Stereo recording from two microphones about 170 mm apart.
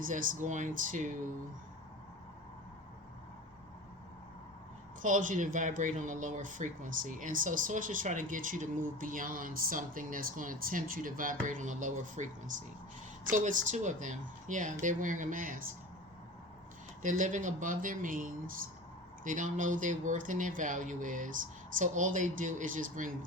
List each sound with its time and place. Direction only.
0.0 s speech: 50° right (ahead or behind)
5.0 s speech: 50° right (ahead or behind)
17.0 s speech: 50° right (ahead or behind)